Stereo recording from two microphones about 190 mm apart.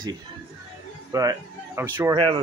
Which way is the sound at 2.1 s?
25° right (ahead or behind).